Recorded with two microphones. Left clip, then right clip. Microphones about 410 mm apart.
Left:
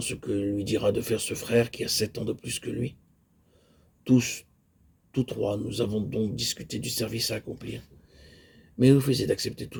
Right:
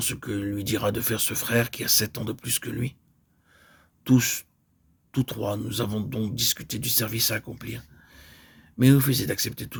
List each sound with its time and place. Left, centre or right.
0.0 s speech: right
4.0 s speech: right
8.1 s a sound: right